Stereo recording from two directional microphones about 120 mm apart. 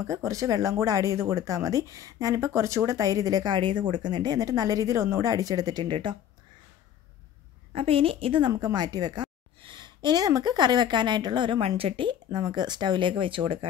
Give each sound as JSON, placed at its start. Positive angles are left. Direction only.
{"t": 0.0, "sound": "speech", "side_deg": -25}
{"t": 7.7, "sound": "a woman's voice", "side_deg": -50}